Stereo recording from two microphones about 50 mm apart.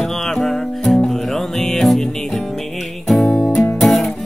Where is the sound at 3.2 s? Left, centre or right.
Centre.